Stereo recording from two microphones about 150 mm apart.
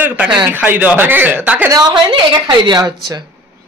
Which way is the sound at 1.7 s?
30° right (ahead or behind).